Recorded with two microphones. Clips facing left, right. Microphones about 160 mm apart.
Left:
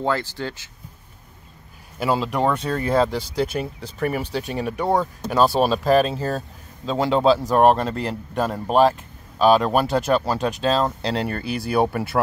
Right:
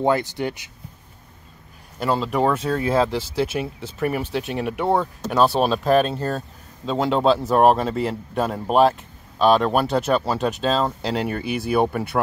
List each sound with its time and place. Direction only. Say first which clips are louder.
0.0 s speech: right 4 dB; 20° right (ahead or behind)
2.0 s speech: even; 5° left (ahead or behind)